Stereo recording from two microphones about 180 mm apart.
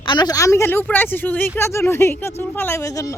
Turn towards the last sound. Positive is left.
turn(degrees=20)  # may be behind; listen again after turning